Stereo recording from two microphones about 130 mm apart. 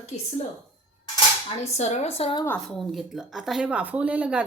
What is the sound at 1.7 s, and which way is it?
Speech, 60° left (ahead or behind).